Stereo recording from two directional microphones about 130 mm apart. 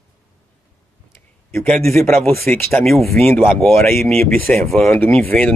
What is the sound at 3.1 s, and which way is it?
Speech, 20° left (ahead or behind).